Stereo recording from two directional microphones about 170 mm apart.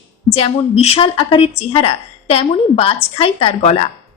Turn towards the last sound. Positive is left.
turn(degrees=35)  # may be behind; listen again after turning